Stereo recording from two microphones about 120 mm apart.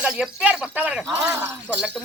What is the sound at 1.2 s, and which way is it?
Speech, 25° right (ahead or behind).